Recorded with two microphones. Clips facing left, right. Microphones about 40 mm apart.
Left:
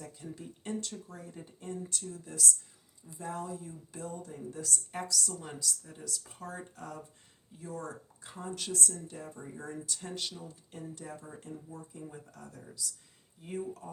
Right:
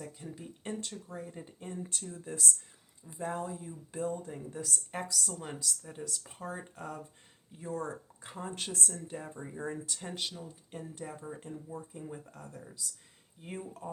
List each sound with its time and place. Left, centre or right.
0.0 s speech: centre
4.4 s a woman's voice: centre
7.6 s speech: right